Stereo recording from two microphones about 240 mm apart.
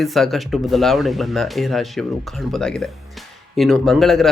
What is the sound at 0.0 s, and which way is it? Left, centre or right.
Speech, centre.